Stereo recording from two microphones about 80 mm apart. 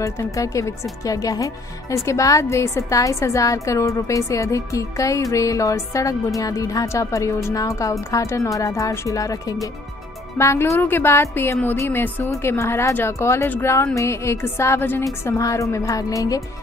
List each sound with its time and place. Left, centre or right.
0.0 s a woman's voice: left
10.3 s speech: left
12.3 s speech: left
15.2 s a woman's voice: left